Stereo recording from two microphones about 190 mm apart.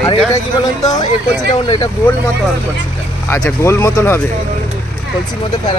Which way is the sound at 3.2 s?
15° left (ahead or behind).